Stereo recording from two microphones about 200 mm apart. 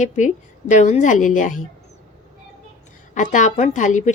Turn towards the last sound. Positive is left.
turn(degrees=40)  # may be behind; listen again after turning